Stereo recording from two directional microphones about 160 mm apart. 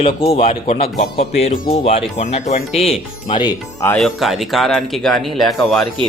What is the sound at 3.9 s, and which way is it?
Speech, centre (ahead or behind).